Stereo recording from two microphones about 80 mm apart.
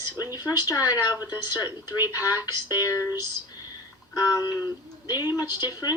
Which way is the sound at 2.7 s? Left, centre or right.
Left.